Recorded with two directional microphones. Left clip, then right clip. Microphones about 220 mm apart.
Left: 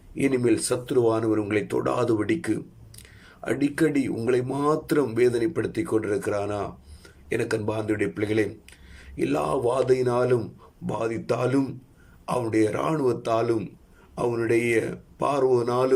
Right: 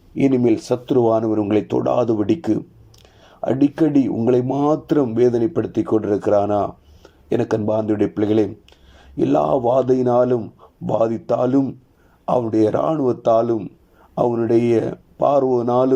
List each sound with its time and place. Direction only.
0.2 s speech: 15° right (ahead or behind)